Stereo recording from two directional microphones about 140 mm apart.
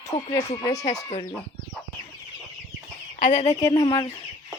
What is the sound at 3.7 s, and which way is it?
Speech, 35° left (ahead or behind).